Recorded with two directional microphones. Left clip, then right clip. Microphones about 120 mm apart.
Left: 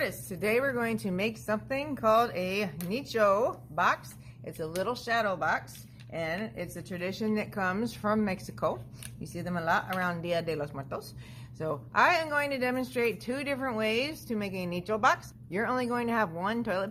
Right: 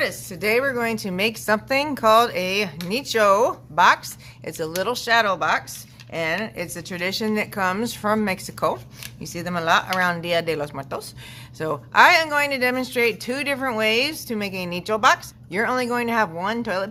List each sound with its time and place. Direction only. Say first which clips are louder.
0.0 s speech: right 8 dB; 5° right (ahead or behind)
1.5 s speech: right 11 dB; 35° right (ahead or behind); by 16.9 s 5° right (ahead or behind)